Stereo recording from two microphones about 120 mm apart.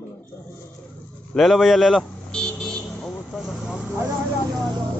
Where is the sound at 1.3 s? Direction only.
Centre (ahead or behind).